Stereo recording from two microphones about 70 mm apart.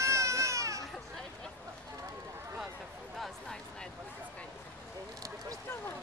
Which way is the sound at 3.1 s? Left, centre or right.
Centre.